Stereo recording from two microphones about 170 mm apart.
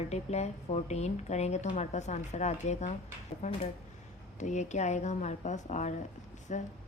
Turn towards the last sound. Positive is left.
turn(degrees=45)  # may be behind; listen again after turning